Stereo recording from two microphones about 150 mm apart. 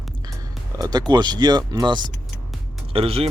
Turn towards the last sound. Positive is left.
turn(degrees=-40)  # may be behind; listen again after turning